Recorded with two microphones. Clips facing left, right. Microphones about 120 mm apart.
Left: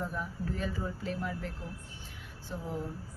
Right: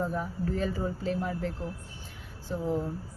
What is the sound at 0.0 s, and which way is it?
Speech, 40° right (ahead or behind).